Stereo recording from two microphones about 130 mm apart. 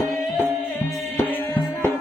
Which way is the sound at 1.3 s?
15° left (ahead or behind).